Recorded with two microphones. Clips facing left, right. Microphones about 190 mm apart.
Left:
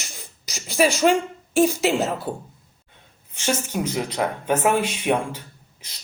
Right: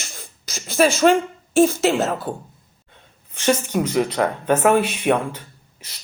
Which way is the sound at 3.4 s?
60° right (ahead or behind).